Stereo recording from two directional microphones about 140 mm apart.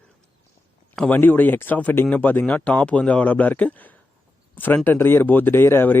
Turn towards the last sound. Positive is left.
turn(degrees=15)  # may be behind; listen again after turning